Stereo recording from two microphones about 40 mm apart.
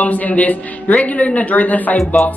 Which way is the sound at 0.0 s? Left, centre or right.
Left.